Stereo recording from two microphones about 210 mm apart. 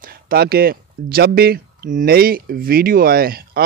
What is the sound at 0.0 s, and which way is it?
Speech, 45° right (ahead or behind).